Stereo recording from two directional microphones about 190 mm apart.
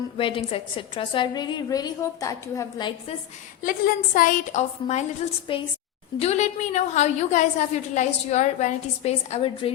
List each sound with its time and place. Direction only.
0.2 s a woman's voice: 25° left (ahead or behind)
3.6 s a woman's voice: 45° left (ahead or behind); by 9.7 s 30° left (ahead or behind)